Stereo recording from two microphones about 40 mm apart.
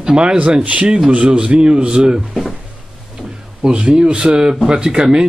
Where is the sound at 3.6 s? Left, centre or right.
Right.